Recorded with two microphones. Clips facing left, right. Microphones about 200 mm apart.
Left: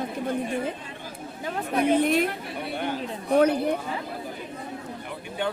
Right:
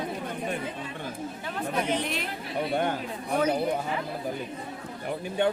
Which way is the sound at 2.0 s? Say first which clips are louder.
Left 10 dB; 50° left (ahead or behind).